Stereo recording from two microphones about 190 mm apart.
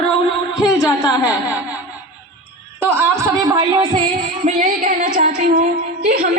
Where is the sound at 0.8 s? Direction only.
20° left (ahead or behind).